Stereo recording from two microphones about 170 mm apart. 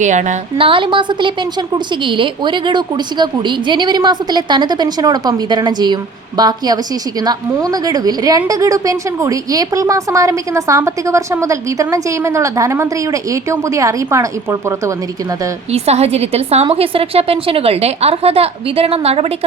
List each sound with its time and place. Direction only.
0.0 s a woman's voice: 45° right (ahead or behind)
0.6 s a woman's voice: 30° right (ahead or behind)
15.7 s a woman's voice: 40° right (ahead or behind)